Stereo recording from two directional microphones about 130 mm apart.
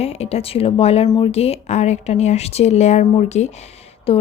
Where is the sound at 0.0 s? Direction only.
55° left (ahead or behind).